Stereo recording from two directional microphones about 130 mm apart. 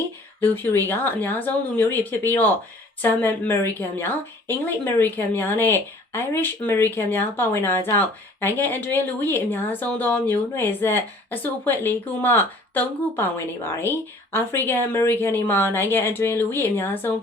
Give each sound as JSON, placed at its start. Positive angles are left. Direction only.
{"t": 0.3, "sound": "a woman's voice", "side_deg": 15}